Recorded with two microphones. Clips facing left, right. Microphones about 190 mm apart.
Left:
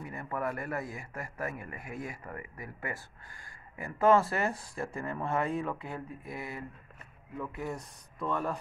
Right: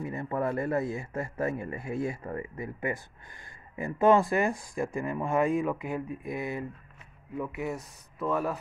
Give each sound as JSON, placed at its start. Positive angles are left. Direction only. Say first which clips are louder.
{"t": 0.0, "sound": "speech", "louder": "right 5 dB", "side_deg": -25}
{"t": 7.3, "sound": "speech", "louder": "right 4 dB", "side_deg": -10}